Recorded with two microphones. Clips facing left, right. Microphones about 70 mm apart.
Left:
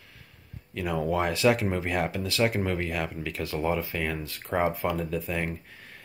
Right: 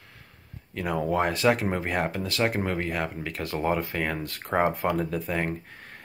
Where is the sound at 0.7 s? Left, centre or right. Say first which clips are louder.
Right 1 dB; right.